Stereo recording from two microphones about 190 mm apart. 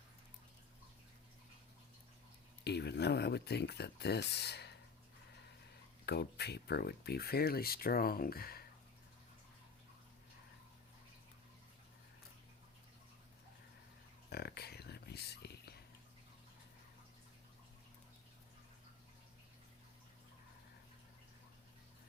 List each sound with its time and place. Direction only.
2.6 s speech: 60° left (ahead or behind)
6.1 s speech: 60° left (ahead or behind)
14.3 s a sound: 55° left (ahead or behind)